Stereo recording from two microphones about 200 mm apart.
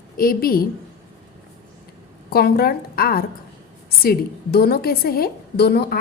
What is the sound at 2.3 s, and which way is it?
A woman's voice, 50° left (ahead or behind).